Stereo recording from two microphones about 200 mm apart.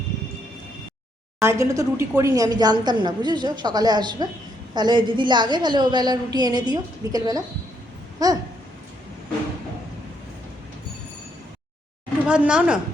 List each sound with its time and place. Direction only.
1.4 s a woman's voice: 15° right (ahead or behind)
8.2 s a sound: 20° right (ahead or behind)
12.3 s a woman's voice: 5° right (ahead or behind)